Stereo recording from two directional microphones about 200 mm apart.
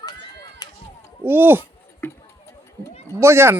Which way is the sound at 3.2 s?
15° right (ahead or behind).